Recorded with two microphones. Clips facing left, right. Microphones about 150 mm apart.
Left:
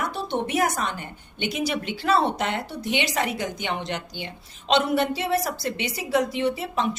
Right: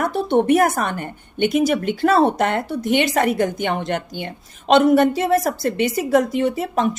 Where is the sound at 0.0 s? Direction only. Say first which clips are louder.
Right 9 dB; 55° right (ahead or behind).